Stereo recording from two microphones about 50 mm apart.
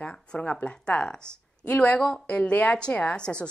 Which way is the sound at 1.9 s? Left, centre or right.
Centre.